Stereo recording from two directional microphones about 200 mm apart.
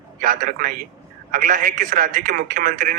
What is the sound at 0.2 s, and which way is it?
Speech, 45° right (ahead or behind).